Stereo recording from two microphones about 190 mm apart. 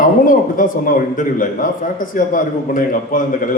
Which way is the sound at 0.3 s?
45° left (ahead or behind).